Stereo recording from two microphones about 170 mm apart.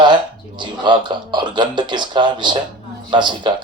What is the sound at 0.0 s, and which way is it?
Speech, 25° right (ahead or behind).